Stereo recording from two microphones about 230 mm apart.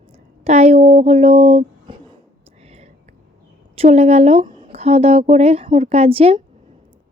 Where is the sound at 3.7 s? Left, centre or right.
Right.